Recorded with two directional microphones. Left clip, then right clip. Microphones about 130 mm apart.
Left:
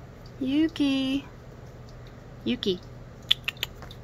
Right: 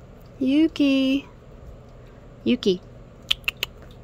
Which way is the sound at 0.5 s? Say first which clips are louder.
Right 5 dB; 90° right.